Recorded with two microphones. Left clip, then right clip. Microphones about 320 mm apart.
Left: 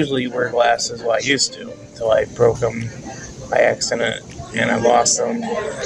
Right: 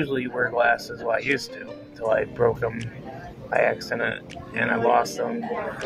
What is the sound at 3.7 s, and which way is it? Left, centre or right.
Speech, right.